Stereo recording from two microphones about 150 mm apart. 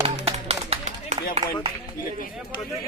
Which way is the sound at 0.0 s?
40° right (ahead or behind).